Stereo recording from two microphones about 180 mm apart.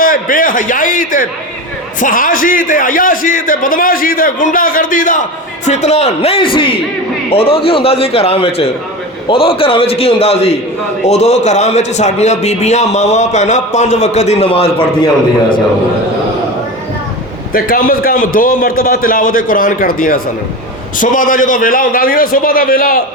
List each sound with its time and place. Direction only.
0.0 s a man's voice: 50° left (ahead or behind); by 15.1 s 30° left (ahead or behind)
17.5 s a man's voice: 50° left (ahead or behind)